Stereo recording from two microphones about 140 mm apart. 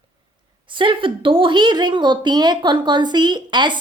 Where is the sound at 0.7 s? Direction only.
35° right (ahead or behind).